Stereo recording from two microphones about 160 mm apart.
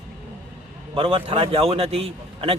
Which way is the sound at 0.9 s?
35° right (ahead or behind).